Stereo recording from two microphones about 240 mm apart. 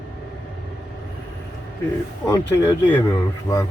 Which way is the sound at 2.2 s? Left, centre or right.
Centre.